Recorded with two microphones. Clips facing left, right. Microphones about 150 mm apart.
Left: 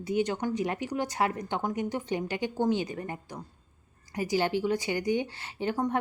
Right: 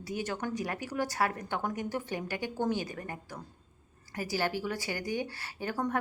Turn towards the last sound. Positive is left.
turn(degrees=20)  # may be behind; listen again after turning